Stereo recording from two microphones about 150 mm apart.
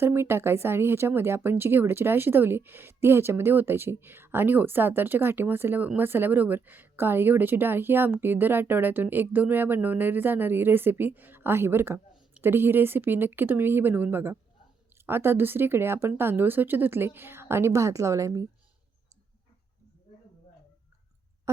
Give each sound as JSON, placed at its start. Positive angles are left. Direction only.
{"t": 0.0, "sound": "speech", "side_deg": -15}